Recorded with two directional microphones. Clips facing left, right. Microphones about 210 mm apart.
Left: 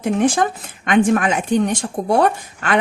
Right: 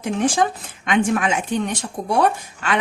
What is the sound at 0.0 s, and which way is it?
Speech, 55° left (ahead or behind).